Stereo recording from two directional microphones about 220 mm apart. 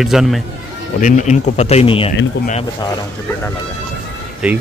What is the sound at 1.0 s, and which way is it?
Speech, 35° left (ahead or behind).